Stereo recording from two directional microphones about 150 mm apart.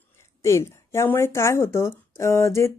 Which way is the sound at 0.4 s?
20° left (ahead or behind).